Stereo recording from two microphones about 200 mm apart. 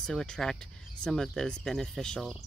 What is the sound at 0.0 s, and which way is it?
Speech, 5° left (ahead or behind).